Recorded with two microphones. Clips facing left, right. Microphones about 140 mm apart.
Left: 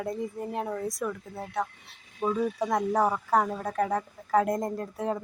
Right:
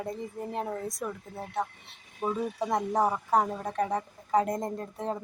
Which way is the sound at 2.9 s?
20° right (ahead or behind).